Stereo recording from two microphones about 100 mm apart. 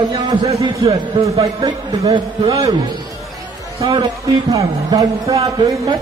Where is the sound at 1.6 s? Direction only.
45° right (ahead or behind).